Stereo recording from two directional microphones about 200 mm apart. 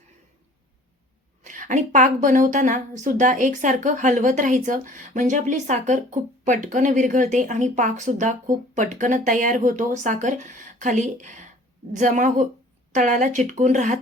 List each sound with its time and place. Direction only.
1.5 s a woman's voice: 40° right (ahead or behind)